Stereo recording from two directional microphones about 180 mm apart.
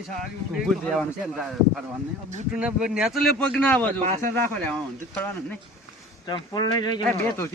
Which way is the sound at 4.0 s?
45° right (ahead or behind).